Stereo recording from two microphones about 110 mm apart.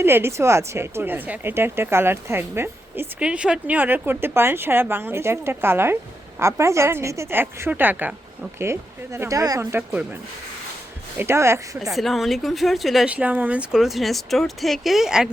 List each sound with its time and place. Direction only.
0.0 s speech: 20° right (ahead or behind)
3.2 s speech: 10° right (ahead or behind); by 9.6 s 30° right (ahead or behind)
9.7 s speech: 10° right (ahead or behind)
11.2 s speech: 25° right (ahead or behind)
11.8 s speech: centre (ahead or behind)
13.1 s speech: 10° right (ahead or behind)